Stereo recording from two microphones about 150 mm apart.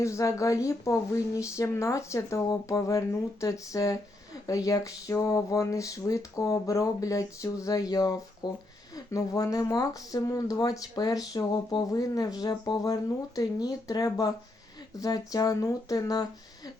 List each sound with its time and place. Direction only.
0.0 s speech: 20° left (ahead or behind)